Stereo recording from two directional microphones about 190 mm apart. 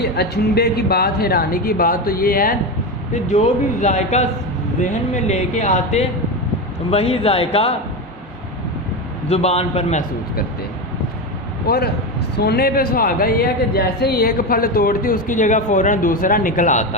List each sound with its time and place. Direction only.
0.0 s speech: 60° left (ahead or behind)
3.2 s speech: 40° left (ahead or behind)
9.3 s speech: 35° left (ahead or behind)
12.4 s speech: 55° left (ahead or behind)